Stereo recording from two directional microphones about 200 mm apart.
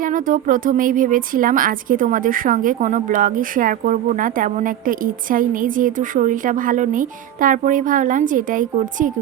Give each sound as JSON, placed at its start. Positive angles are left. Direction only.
{"t": 0.0, "sound": "a woman's voice", "side_deg": -40}